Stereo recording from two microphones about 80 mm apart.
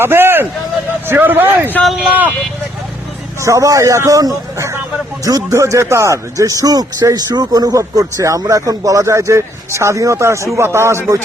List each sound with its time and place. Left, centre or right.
0.0 s a man's voice: right
1.8 s speech: centre
2.0 s a man's voice: right
3.4 s speech: right